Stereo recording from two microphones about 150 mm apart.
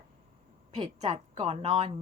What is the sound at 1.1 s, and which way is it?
Speech, 40° right (ahead or behind).